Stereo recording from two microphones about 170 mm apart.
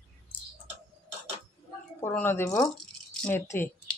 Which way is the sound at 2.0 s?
10° left (ahead or behind).